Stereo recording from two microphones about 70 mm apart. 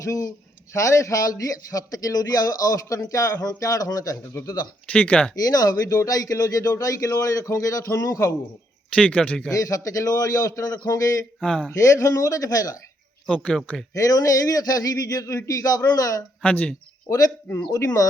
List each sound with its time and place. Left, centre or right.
0.0 s a man's voice: left
4.9 s speech: left
5.4 s a man's voice: left
9.0 s a man's voice: centre
9.6 s a man's voice: left
11.3 s speech: centre
11.8 s a man's voice: left
13.2 s a man's voice: centre
13.9 s a man's voice: left
16.4 s speech: centre
17.7 s a man's voice: left